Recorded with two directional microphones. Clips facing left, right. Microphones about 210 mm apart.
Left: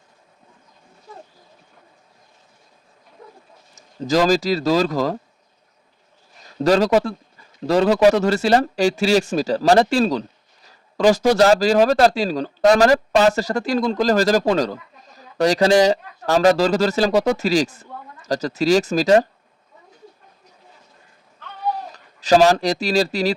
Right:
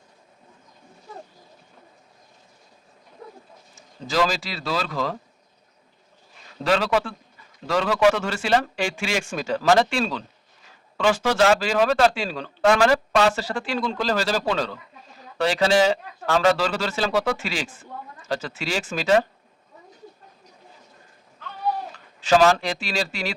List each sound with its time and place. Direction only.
3.8 s speech: 40° left (ahead or behind)
6.6 s speech: 40° left (ahead or behind)
21.9 s speech: 40° left (ahead or behind)